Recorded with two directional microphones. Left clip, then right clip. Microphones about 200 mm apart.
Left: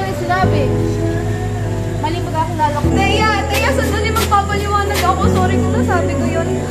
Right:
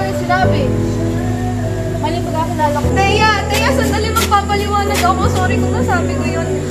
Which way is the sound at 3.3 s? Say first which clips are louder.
Right 1 dB; centre (ahead or behind).